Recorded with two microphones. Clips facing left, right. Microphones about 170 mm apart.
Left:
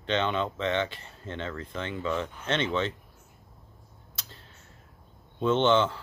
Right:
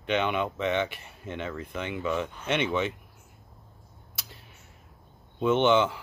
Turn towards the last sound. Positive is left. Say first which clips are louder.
# right 1 dB
turn(degrees=-10)  # may be behind; listen again after turning